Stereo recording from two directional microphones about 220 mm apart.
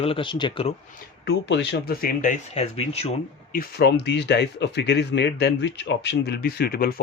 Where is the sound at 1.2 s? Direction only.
50° left (ahead or behind); by 3.1 s 25° left (ahead or behind).